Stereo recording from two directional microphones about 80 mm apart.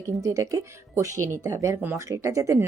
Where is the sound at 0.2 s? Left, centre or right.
Right.